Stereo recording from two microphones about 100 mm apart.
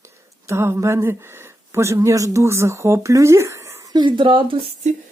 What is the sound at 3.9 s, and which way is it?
Speech, 55° right (ahead or behind).